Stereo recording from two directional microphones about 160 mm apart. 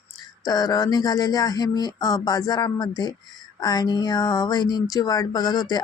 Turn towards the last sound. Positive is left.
turn(degrees=25)  # may be behind; listen again after turning